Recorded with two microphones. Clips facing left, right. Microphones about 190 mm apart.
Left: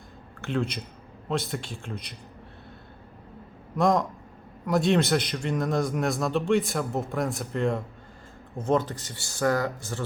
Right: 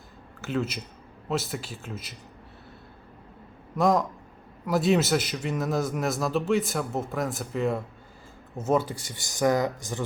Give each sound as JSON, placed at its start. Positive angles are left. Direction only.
{"t": 0.4, "sound": "a man's voice", "side_deg": -5}
{"t": 3.8, "sound": "a man's voice", "side_deg": 0}